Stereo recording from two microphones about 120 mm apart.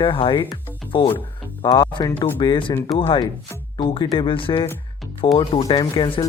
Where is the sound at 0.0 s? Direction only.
45° left (ahead or behind).